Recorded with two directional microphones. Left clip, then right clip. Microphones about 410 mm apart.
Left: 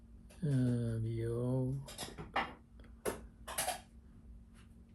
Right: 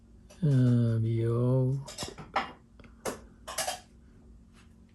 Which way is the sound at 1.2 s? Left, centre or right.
Right.